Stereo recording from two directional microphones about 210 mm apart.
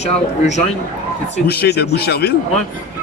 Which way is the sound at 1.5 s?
50° left (ahead or behind).